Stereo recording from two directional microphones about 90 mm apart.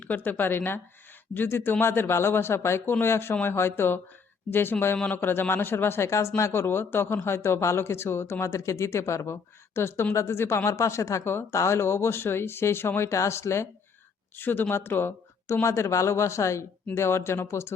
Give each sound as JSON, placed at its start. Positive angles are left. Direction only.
{"t": 0.0, "sound": "speech", "side_deg": 20}